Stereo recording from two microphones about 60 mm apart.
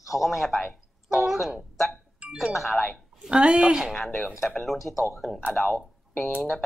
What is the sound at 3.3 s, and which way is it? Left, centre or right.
Speech, centre.